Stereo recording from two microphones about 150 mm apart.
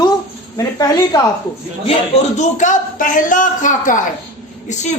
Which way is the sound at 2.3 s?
55° left (ahead or behind).